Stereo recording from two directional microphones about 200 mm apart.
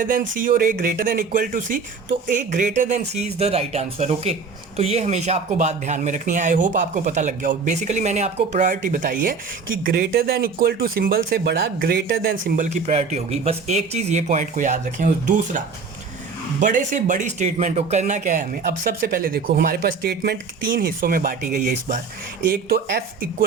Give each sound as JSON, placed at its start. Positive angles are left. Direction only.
{"t": 0.0, "sound": "speech", "side_deg": -45}
{"t": 9.8, "sound": "speech", "side_deg": -50}
{"t": 22.4, "sound": "speech", "side_deg": -50}